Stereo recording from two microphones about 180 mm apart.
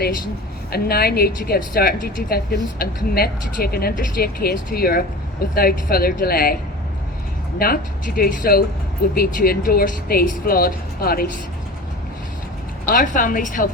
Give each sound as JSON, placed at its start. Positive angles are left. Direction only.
{"t": 0.7, "sound": "speech", "side_deg": 60}
{"t": 7.6, "sound": "speech", "side_deg": 55}
{"t": 12.8, "sound": "a woman's voice", "side_deg": 50}